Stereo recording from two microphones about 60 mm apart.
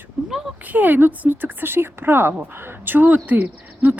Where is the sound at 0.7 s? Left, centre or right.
Right.